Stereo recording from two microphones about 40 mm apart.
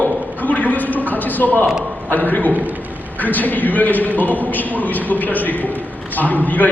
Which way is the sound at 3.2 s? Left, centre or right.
Left.